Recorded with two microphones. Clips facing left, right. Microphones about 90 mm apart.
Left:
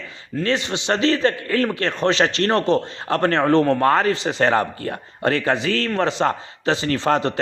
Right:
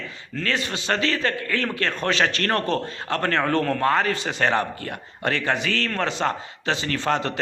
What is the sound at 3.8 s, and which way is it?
A man's voice, 35° left (ahead or behind).